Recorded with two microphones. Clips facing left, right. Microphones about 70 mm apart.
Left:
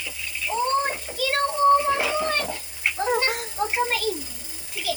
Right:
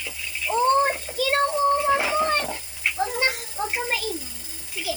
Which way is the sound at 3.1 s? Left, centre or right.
Left.